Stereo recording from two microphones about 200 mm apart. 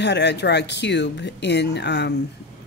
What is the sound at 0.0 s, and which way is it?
Speech, 60° left (ahead or behind).